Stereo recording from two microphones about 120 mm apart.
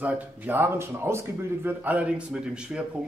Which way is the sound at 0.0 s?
15° right (ahead or behind).